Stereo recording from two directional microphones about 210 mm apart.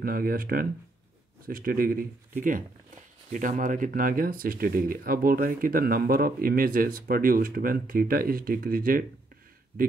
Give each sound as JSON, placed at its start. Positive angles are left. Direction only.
{"t": 0.0, "sound": "speech", "side_deg": -45}